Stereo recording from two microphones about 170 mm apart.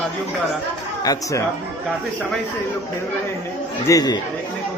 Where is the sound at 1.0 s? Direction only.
20° left (ahead or behind).